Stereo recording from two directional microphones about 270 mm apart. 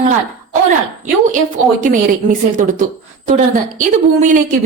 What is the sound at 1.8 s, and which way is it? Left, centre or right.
A woman's voice, right.